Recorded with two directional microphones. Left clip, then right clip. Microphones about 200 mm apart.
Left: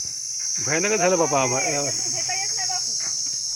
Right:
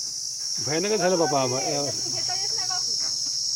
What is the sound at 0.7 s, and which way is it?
Speech, 10° left (ahead or behind).